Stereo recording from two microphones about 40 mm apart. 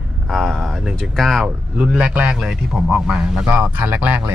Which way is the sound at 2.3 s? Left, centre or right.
Centre.